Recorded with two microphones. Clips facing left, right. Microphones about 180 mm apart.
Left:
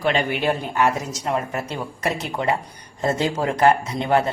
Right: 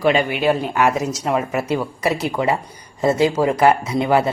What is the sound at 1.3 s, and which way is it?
Speech, 85° right.